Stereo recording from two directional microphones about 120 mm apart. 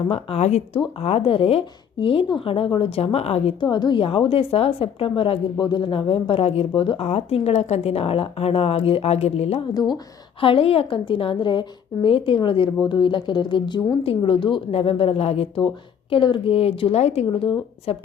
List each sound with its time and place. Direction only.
0.1 s a woman's voice: 60° left (ahead or behind)
3.6 s a woman's voice: 40° left (ahead or behind); by 9.6 s 60° left (ahead or behind)
9.7 s a woman's voice: 35° left (ahead or behind)
10.4 s a woman's voice: 50° left (ahead or behind)